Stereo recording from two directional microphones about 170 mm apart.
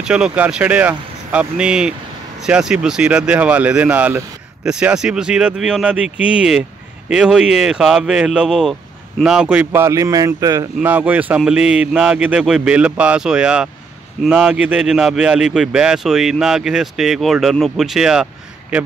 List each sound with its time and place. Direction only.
0.0 s a man's voice: 5° right (ahead or behind); by 10.7 s 20° right (ahead or behind)
10.8 s a man's voice: 10° right (ahead or behind)